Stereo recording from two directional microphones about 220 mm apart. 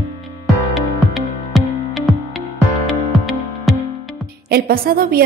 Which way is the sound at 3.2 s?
Centre (ahead or behind).